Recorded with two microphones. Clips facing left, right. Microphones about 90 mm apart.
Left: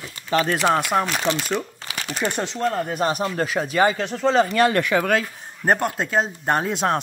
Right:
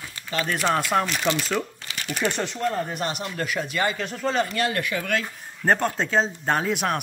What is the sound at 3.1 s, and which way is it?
Speech, 35° left (ahead or behind).